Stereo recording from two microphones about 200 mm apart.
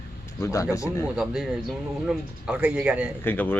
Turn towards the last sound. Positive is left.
turn(degrees=10)  # may be behind; listen again after turning